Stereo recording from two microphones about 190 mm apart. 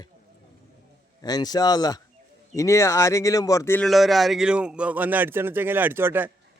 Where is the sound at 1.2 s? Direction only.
20° left (ahead or behind).